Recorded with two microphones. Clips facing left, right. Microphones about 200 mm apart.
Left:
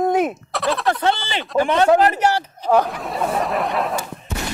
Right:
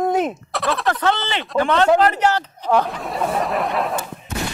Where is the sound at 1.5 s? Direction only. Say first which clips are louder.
Left 1 dB; 15° left (ahead or behind).